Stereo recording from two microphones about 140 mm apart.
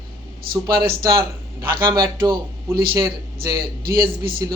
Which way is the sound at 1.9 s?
30° right (ahead or behind).